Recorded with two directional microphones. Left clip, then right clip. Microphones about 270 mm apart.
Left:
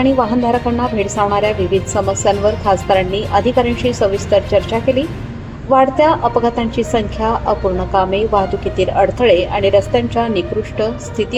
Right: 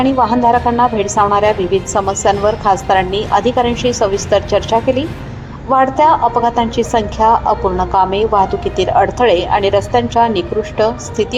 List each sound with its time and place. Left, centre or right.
0.0 s a woman's voice: right